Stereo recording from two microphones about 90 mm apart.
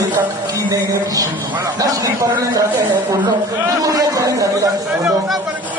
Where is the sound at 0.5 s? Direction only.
40° right (ahead or behind).